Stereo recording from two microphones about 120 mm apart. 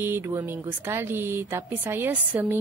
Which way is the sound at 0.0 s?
20° right (ahead or behind).